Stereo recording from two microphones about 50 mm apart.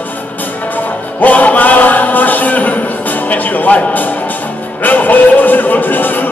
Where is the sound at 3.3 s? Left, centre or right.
Left.